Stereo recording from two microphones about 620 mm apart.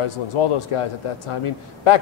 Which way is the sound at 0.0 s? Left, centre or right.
Left.